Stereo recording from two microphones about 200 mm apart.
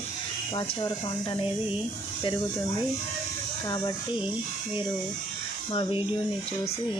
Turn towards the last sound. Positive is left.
turn(degrees=25)  # may be behind; listen again after turning